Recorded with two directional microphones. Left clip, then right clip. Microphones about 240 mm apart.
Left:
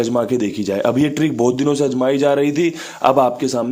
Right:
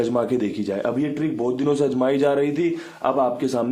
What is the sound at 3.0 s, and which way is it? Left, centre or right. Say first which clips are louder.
Speech: left 7 dB; left.